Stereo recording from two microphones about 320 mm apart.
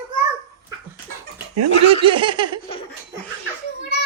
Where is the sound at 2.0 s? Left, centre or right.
Centre.